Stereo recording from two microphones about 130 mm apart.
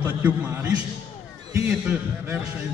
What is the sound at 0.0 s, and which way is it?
Speech, 15° right (ahead or behind).